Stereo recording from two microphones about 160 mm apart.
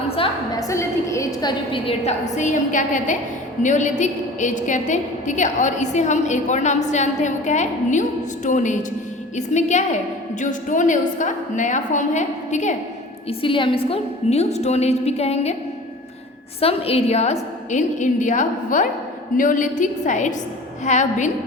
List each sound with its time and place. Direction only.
0.7 s a woman's voice: 20° left (ahead or behind); by 12.7 s 50° left (ahead or behind)
13.2 s a woman's voice: 35° left (ahead or behind)
16.6 s a woman's voice: 40° left (ahead or behind)